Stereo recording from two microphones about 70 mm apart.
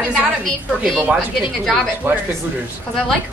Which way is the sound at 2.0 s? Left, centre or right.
Right.